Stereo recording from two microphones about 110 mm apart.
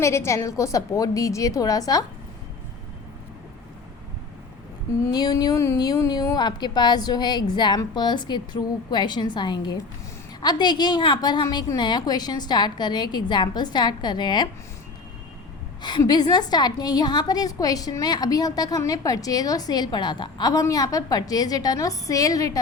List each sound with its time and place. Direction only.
0.0 s a woman's voice: 25° left (ahead or behind)
5.1 s a woman's voice: 40° left (ahead or behind)
15.8 s a woman's voice: 40° left (ahead or behind)